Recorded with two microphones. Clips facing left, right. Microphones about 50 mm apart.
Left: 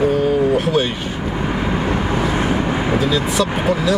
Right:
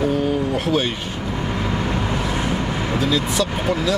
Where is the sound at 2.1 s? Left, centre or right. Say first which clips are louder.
Left 4 dB; left.